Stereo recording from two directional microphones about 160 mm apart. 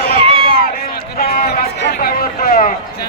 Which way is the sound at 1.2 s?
65° left (ahead or behind).